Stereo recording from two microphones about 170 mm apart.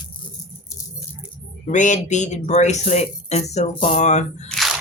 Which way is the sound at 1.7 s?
45° left (ahead or behind).